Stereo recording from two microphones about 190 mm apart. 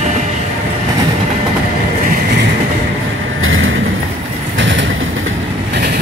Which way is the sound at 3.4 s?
90° right.